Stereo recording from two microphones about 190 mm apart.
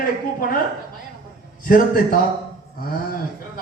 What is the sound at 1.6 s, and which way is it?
Speech, 50° left (ahead or behind).